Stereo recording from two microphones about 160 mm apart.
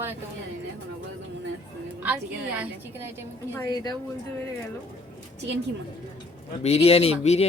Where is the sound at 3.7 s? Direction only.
25° left (ahead or behind).